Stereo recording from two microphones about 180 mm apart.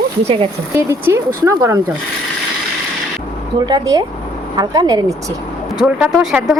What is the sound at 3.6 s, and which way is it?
A woman's voice, 20° right (ahead or behind).